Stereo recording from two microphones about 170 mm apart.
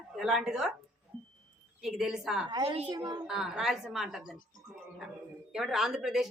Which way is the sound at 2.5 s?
30° right (ahead or behind).